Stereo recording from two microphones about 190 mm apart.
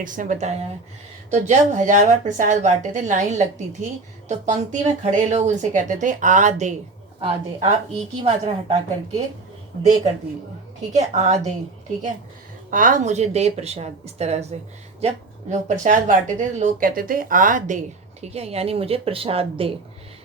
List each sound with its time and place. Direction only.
0.0 s a woman's voice: 45° right (ahead or behind)
9.8 s a woman's voice: 40° right (ahead or behind)
12.7 s a woman's voice: 45° right (ahead or behind)
18.2 s a woman's voice: 35° right (ahead or behind)